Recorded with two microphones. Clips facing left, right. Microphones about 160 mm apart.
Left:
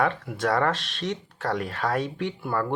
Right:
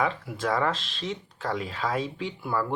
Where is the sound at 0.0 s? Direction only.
65° left (ahead or behind).